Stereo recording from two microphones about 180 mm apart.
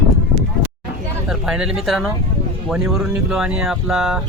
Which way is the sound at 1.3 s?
5° right (ahead or behind).